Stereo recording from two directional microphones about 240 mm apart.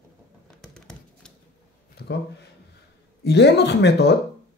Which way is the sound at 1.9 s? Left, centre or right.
Left.